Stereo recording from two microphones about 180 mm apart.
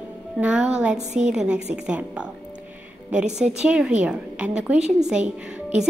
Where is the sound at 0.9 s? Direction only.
40° right (ahead or behind).